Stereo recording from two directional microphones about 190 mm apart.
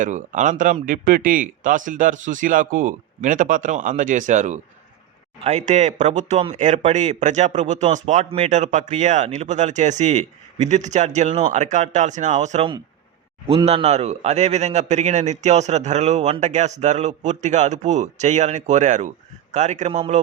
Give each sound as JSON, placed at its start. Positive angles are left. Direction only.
{"t": 0.0, "sound": "speech", "side_deg": -40}